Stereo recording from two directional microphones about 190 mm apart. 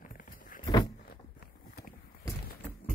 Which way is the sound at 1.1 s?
50° left (ahead or behind).